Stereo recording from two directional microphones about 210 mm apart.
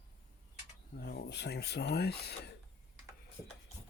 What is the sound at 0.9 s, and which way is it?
Speech, 50° left (ahead or behind).